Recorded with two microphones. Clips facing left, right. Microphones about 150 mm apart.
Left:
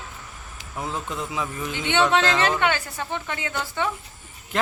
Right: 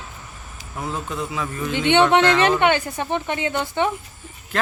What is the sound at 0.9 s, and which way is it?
Speech, 15° right (ahead or behind).